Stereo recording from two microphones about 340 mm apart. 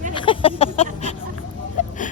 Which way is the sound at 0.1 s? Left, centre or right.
Centre.